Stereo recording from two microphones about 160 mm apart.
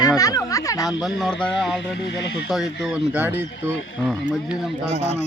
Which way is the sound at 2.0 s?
90° left.